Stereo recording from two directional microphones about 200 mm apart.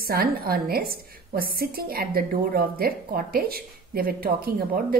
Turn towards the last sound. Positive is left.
turn(degrees=-50)  # may be behind; listen again after turning